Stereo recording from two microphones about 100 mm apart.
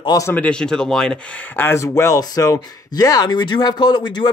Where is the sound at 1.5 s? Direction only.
25° left (ahead or behind).